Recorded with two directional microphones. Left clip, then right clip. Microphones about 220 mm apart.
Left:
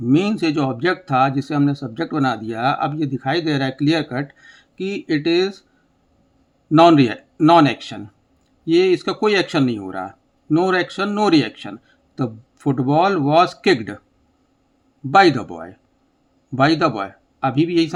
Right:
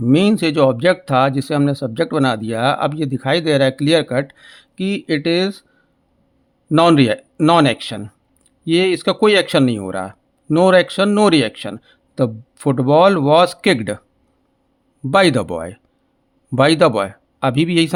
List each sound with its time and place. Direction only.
0.0 s speech: 40° right (ahead or behind)
6.7 s speech: 40° right (ahead or behind)
15.1 s speech: 45° right (ahead or behind)